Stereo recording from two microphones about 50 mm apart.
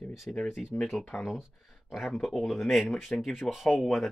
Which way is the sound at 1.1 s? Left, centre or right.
Left.